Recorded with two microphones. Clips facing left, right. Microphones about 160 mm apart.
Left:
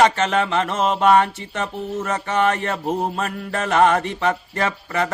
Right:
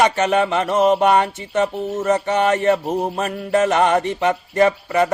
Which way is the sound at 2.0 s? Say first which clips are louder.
Right 3 dB; 20° right (ahead or behind).